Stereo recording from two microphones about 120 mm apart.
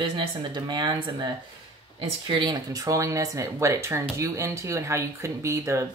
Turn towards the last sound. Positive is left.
turn(degrees=-25)  # may be behind; listen again after turning